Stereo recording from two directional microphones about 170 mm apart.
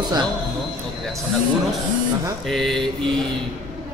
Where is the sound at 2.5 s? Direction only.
Centre (ahead or behind).